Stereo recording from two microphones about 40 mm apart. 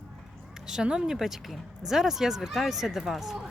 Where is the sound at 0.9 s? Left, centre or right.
Centre.